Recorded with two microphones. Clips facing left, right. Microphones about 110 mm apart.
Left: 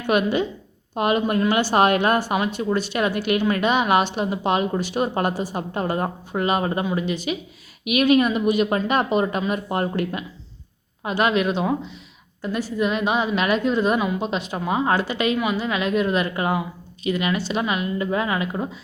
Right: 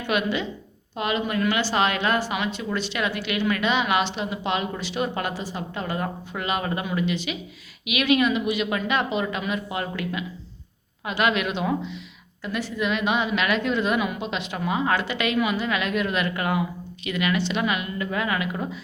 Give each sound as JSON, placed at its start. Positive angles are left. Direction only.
{"t": 0.1, "sound": "a woman's voice", "side_deg": 45}
{"t": 9.2, "sound": "a woman's voice", "side_deg": 30}
{"t": 9.5, "sound": "a woman's voice", "side_deg": 45}